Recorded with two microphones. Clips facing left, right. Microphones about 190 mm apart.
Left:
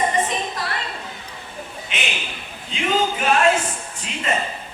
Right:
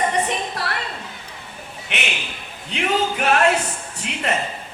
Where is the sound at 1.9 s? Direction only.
65° right (ahead or behind).